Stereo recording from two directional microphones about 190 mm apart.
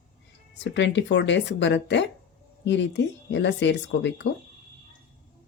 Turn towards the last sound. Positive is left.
turn(degrees=65)  # may be behind; listen again after turning